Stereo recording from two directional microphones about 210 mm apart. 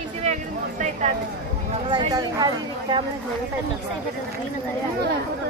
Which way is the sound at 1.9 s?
20° right (ahead or behind).